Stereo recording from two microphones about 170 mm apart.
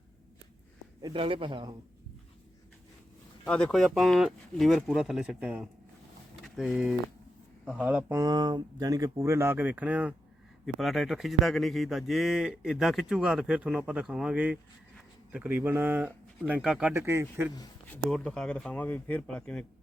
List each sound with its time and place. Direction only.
1.0 s speech: 30° right (ahead or behind)
3.4 s speech: 5° left (ahead or behind)
16.9 s speech: 15° right (ahead or behind)
17.8 s speech: 10° left (ahead or behind)